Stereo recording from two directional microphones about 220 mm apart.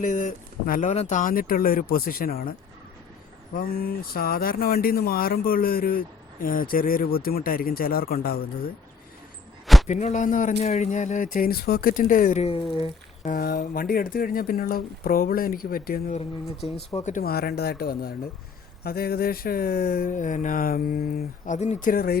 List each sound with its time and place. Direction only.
0.0 s speech: 35° left (ahead or behind)
9.8 s speech: 35° left (ahead or behind)
12.7 s a sound: 25° left (ahead or behind)
13.3 s speech: 40° left (ahead or behind)